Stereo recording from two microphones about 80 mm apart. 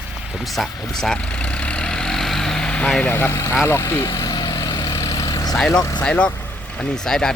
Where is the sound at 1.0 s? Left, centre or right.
Centre.